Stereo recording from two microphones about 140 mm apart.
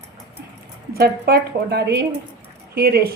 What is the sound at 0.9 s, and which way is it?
Speech, 90° right.